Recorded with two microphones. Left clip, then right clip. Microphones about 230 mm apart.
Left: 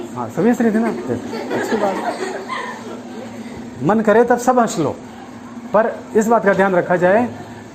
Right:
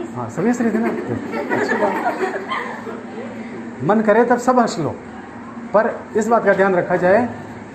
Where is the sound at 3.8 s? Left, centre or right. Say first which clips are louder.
Left 1 dB; left.